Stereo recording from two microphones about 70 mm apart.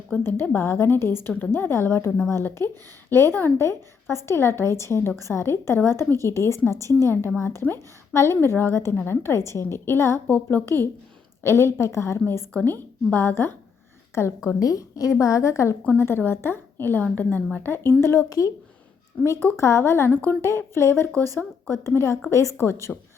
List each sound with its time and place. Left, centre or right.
0.2 s a woman's voice: left
10.2 s a woman's voice: centre
11.4 s a woman's voice: left
12.6 s a woman's voice: left
14.6 s a woman's voice: left
15.1 s a woman's voice: left
15.8 s a woman's voice: left
16.0 s a woman's voice: left
18.3 s a woman's voice: left
19.2 s a woman's voice: left